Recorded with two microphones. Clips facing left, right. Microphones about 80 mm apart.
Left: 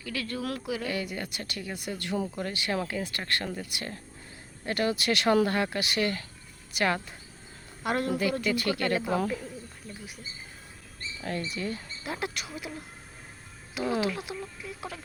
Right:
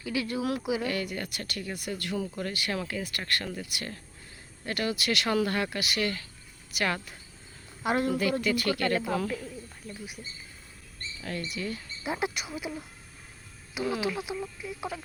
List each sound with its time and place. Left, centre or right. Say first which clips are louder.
0.0 s speech: right 3 dB; centre
0.9 s speech: right 1 dB; centre
7.8 s a woman's voice: right 1 dB; centre
8.5 s speech: even; left
11.2 s speech: left 2 dB; left
12.0 s speech: right 3 dB; centre
13.8 s speech: left 2 dB; left
14.1 s speech: right 2 dB; centre